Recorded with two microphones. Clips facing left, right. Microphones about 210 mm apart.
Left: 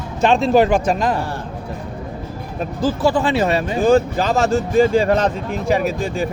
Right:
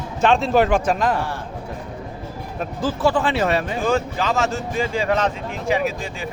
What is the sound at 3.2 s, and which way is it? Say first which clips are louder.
Speech: left 3 dB; 40° left (ahead or behind).